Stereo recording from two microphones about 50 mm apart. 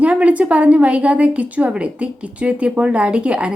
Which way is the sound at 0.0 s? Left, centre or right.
Right.